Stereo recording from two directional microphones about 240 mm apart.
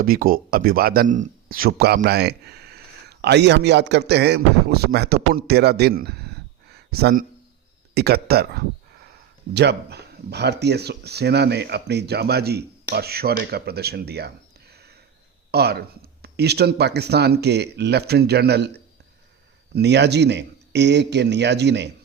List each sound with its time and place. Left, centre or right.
0.0 s speech: right
14.7 s sniff: right
15.5 s speech: right